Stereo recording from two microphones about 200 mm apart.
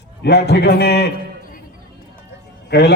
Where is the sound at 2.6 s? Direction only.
55° left (ahead or behind).